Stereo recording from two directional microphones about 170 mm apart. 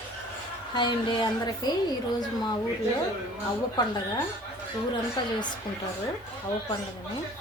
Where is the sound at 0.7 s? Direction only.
25° left (ahead or behind).